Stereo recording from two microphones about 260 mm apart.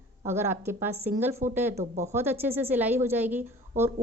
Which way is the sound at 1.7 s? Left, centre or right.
Right.